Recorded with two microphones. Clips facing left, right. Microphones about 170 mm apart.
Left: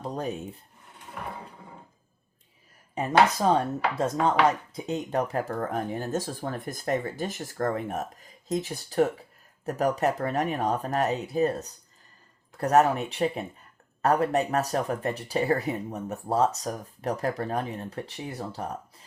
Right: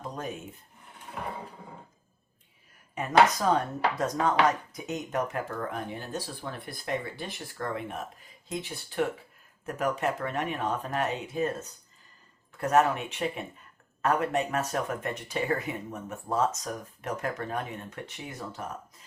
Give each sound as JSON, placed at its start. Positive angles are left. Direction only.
{"t": 0.0, "sound": "speech", "side_deg": 35}
{"t": 2.9, "sound": "speech", "side_deg": 30}